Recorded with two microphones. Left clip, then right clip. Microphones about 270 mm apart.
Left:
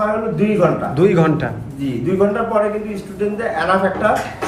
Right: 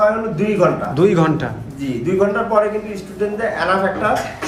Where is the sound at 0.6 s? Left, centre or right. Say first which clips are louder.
Right 1 dB; centre.